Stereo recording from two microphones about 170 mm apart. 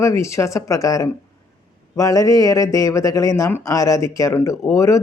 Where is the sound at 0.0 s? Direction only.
15° left (ahead or behind).